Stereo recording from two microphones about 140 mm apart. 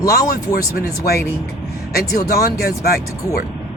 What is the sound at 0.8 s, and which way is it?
Speech, 90° left.